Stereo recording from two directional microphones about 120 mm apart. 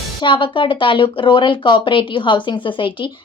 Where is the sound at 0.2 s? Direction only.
45° left (ahead or behind).